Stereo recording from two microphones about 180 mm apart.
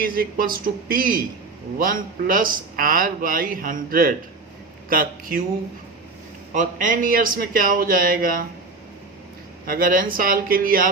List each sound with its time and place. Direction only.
0.0 s a man's voice: 55° right (ahead or behind)
6.5 s a man's voice: 45° right (ahead or behind)
9.6 s a man's voice: 50° right (ahead or behind)